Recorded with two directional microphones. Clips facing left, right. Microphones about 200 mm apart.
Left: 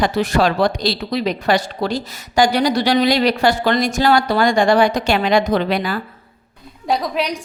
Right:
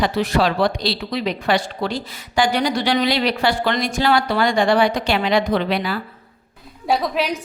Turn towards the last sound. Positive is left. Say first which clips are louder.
# even
turn(degrees=0)  # may be behind; listen again after turning